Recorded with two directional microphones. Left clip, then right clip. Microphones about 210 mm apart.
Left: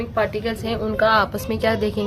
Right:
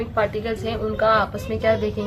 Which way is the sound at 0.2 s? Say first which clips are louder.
Left 1 dB; 35° left (ahead or behind).